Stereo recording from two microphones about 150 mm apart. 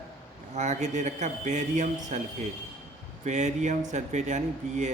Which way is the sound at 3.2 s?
50° right (ahead or behind).